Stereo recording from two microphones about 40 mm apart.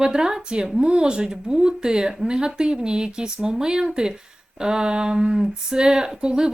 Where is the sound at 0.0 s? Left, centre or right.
Centre.